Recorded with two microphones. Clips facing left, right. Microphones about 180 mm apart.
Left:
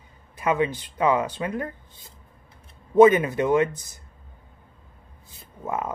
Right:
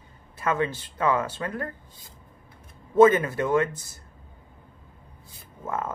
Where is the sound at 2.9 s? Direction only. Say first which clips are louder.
Left 2 dB; 15° left (ahead or behind).